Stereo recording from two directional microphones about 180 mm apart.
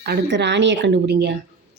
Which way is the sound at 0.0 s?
70° right (ahead or behind).